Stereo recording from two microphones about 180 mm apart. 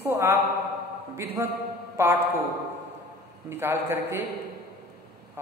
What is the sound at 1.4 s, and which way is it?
Speech, 15° right (ahead or behind).